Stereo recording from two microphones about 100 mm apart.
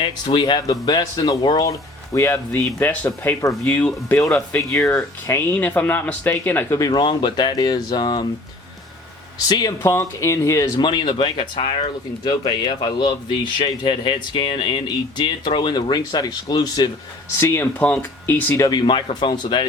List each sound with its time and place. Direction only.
0.0 s speech: 50° left (ahead or behind); by 2.8 s 30° left (ahead or behind)
2.8 s speech: 15° left (ahead or behind)
6.7 s speech: 45° left (ahead or behind)
9.5 s speech: 45° left (ahead or behind)
9.8 s speech: 30° left (ahead or behind)
10.8 s speech: 50° left (ahead or behind); by 11.9 s 75° left (ahead or behind)
12.2 s speech: 45° left (ahead or behind)
17.4 s speech: 25° left (ahead or behind)
18.5 s speech: 35° left (ahead or behind)
18.8 s speech: 55° left (ahead or behind)